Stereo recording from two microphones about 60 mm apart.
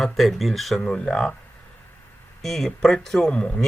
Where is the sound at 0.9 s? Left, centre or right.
Centre.